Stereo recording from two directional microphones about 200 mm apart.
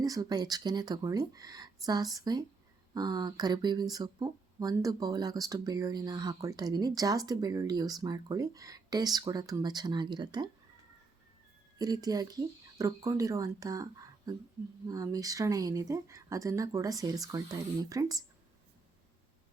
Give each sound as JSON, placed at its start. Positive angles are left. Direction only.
{"t": 0.0, "sound": "speech", "side_deg": -20}
{"t": 11.8, "sound": "speech", "side_deg": -20}